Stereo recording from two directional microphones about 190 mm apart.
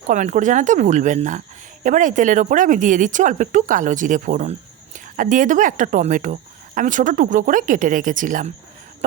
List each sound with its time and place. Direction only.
0.1 s speech: 40° right (ahead or behind)